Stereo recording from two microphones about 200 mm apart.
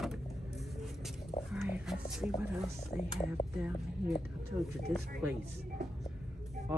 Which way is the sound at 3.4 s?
30° left (ahead or behind).